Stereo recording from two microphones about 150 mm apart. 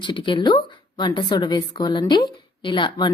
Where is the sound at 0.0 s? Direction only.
35° left (ahead or behind).